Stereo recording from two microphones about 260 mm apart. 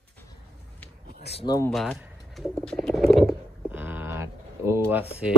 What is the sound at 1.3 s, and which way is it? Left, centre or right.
Speech, centre.